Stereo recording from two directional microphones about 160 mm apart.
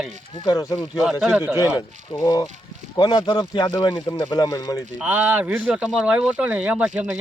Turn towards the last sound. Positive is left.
turn(degrees=-5)  # may be behind; listen again after turning